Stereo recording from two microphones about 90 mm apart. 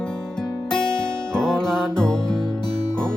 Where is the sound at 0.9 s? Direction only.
5° left (ahead or behind).